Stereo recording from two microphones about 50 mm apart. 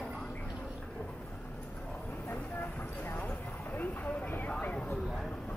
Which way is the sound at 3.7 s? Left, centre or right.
Left.